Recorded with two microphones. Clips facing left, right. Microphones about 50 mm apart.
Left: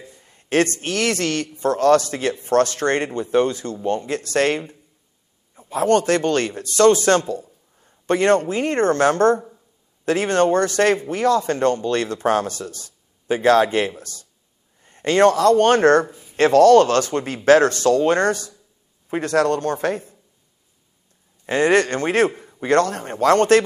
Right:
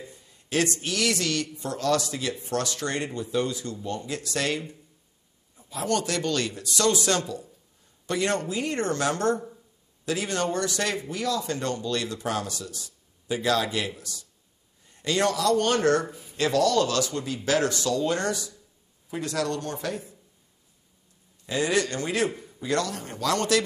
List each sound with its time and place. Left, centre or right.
0.2 s a man's voice: left
21.5 s a man's voice: left